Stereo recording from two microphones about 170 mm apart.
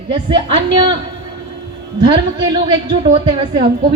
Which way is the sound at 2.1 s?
25° right (ahead or behind).